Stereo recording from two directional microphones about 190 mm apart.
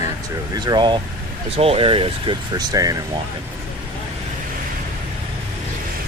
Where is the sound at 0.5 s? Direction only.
20° right (ahead or behind).